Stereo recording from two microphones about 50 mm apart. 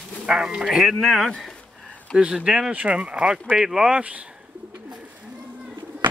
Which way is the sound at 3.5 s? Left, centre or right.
Centre.